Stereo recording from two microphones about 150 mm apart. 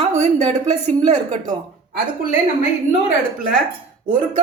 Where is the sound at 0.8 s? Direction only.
50° right (ahead or behind).